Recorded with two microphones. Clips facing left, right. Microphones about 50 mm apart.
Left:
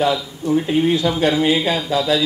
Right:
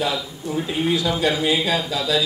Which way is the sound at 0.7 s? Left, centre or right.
Left.